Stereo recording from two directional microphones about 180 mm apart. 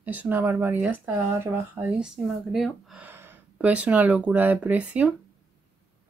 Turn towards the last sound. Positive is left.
turn(degrees=-10)  # may be behind; listen again after turning